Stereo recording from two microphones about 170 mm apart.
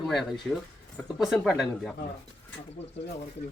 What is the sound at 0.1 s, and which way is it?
Speech, centre (ahead or behind).